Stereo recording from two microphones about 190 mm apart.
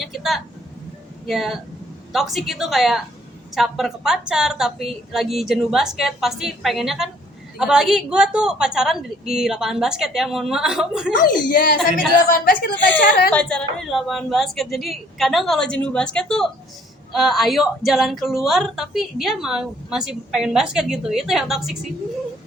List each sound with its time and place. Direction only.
0.0 s a sound: centre (ahead or behind)
1.3 s speech: centre (ahead or behind)
11.2 s speech: 45° left (ahead or behind)
13.3 s speech: 5° left (ahead or behind)